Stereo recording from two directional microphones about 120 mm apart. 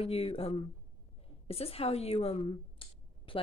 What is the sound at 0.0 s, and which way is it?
Speech, 55° left (ahead or behind).